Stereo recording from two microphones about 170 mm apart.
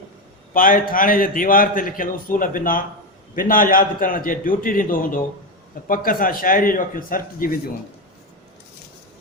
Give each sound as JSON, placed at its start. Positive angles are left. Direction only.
{"t": 0.5, "sound": "a man's voice", "side_deg": 55}